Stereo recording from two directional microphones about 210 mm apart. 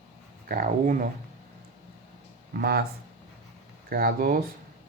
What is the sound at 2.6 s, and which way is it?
Speech, 45° right (ahead or behind).